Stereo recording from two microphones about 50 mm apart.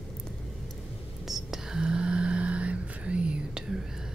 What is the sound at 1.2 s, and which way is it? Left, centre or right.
Whispering, centre.